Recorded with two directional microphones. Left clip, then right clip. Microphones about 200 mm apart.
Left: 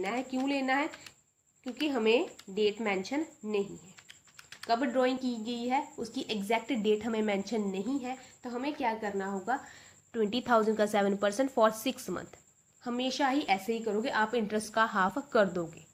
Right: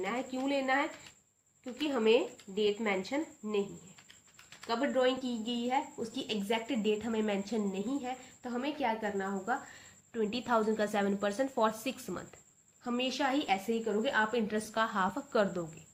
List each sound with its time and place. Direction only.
0.0 s a sound: 35° left (ahead or behind)
0.3 s a woman's voice: 40° left (ahead or behind)
4.6 s a woman's voice: 35° left (ahead or behind)
12.8 s a woman's voice: 20° left (ahead or behind)